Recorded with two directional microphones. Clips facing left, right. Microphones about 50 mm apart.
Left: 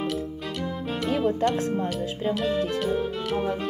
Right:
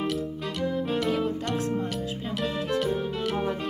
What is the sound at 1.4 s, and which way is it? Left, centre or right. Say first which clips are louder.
Speech: left 4 dB; centre.